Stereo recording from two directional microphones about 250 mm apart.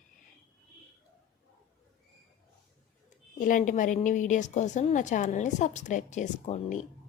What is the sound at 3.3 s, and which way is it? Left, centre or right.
A woman's voice, left.